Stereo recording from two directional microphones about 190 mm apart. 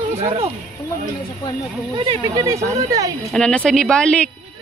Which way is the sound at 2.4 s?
15° right (ahead or behind).